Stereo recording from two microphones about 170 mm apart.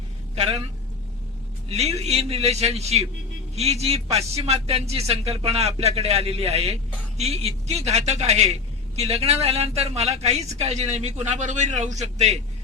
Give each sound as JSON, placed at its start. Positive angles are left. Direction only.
{"t": 0.3, "sound": "a man's voice", "side_deg": -40}
{"t": 1.7, "sound": "a woman's voice", "side_deg": -40}